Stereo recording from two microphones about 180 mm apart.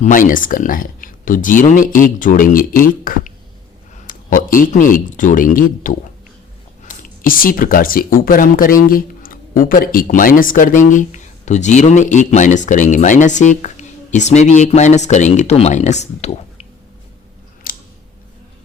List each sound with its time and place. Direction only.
0.0 s speech: 50° left (ahead or behind)
17.7 s scissors: 55° left (ahead or behind)